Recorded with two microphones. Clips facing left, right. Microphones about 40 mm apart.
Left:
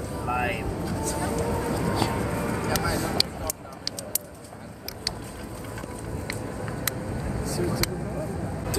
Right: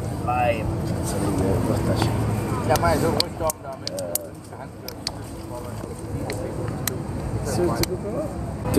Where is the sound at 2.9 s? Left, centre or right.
Centre.